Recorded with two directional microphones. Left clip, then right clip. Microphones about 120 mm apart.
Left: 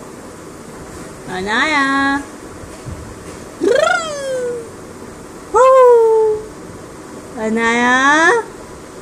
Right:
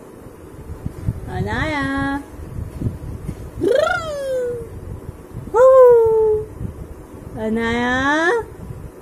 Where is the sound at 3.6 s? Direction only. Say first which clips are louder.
Left 3 dB; 90° right.